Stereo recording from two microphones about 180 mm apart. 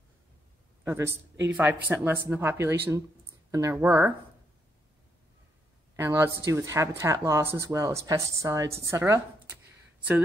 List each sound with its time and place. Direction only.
0.8 s speech: 15° right (ahead or behind)
5.9 s speech: 15° right (ahead or behind)